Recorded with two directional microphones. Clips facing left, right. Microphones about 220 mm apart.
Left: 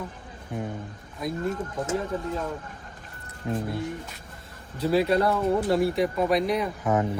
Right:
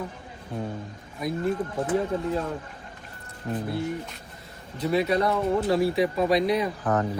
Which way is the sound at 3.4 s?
15° left (ahead or behind).